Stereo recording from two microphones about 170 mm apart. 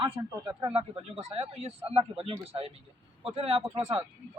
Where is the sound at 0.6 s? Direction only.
30° right (ahead or behind).